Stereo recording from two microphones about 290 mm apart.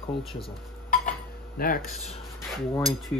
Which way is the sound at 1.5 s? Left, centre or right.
Left.